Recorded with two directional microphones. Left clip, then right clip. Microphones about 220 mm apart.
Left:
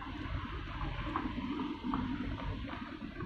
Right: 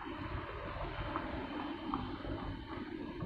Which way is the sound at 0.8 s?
55° left (ahead or behind).